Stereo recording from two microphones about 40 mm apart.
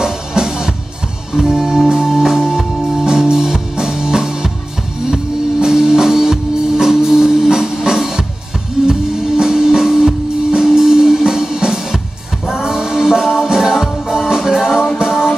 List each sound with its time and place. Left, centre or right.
0.0 s music: centre